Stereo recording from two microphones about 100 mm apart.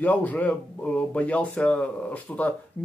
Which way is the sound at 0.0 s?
15° left (ahead or behind).